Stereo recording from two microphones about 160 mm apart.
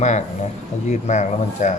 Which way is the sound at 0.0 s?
45° left (ahead or behind).